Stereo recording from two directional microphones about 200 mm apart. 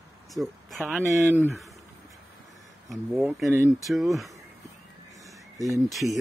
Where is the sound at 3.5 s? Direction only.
10° right (ahead or behind).